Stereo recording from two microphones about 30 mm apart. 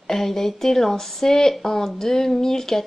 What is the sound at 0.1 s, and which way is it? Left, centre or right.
Speech, centre.